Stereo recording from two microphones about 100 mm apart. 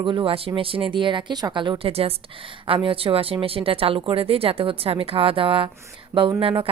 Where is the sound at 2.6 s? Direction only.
65° right (ahead or behind).